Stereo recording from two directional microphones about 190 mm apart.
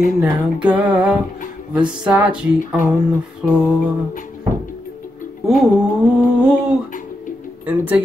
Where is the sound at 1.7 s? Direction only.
5° right (ahead or behind).